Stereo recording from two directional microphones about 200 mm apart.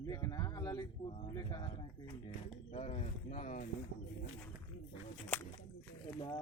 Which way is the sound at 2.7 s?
30° left (ahead or behind).